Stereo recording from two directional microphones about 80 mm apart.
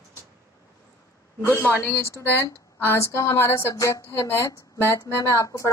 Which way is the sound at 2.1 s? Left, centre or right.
Left.